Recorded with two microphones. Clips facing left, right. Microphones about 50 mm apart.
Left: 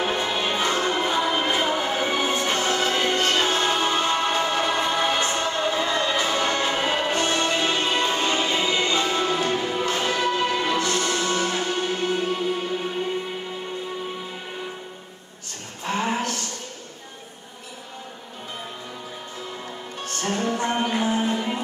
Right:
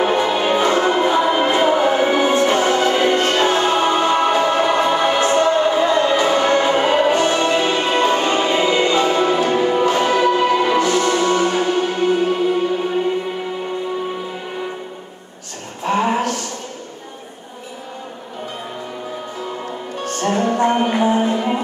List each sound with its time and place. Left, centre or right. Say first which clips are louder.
0.0 s music: right 8 dB; centre
15.8 s a sound: right 7 dB; centre
20.2 s music: right 8 dB; centre